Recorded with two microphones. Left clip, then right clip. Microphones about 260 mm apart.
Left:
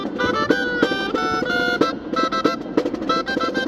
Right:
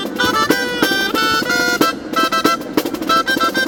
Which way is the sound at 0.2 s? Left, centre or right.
Right.